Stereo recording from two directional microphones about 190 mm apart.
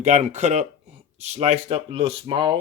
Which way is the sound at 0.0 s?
35° right (ahead or behind).